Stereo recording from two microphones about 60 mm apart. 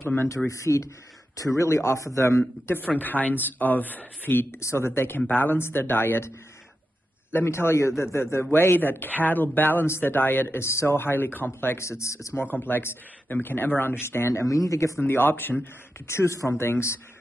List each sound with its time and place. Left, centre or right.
0.0 s speech: left
0.5 s speech: left
2.8 s speech: left
4.6 s speech: left
5.2 s speech: left
7.4 s speech: left
11.8 s speech: left
12.4 s speech: left
15.0 s speech: left
15.6 s speech: left